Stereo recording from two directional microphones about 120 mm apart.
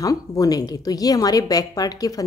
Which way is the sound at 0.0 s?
30° left (ahead or behind).